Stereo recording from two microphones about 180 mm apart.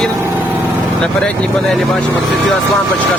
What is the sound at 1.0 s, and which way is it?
Speech, 5° left (ahead or behind).